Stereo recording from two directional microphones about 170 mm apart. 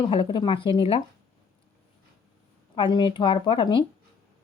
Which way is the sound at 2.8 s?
30° left (ahead or behind).